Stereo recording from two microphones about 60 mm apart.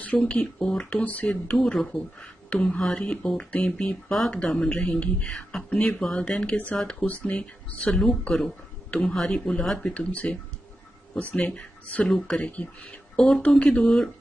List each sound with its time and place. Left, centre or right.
0.2 s speech: centre
0.9 s speech: left; by 9.8 s centre
9.8 s speech: left